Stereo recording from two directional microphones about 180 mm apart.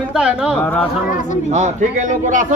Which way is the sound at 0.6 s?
10° left (ahead or behind).